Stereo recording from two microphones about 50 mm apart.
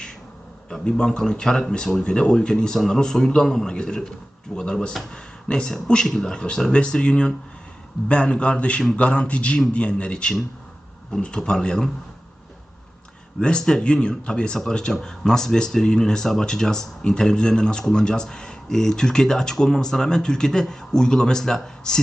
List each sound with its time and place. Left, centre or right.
0.7 s speech: centre
13.4 s speech: centre